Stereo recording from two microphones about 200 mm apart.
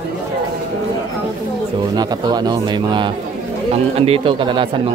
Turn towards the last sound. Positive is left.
turn(degrees=-25)  # may be behind; listen again after turning